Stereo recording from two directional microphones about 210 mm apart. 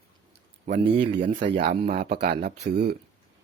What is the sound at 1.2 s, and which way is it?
A man's voice, 40° right (ahead or behind).